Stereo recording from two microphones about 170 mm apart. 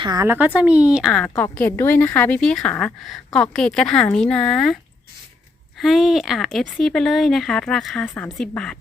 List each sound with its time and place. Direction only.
0.0 s speech: 20° right (ahead or behind)
0.3 s a woman's voice: 10° right (ahead or behind)
5.8 s a woman's voice: centre (ahead or behind)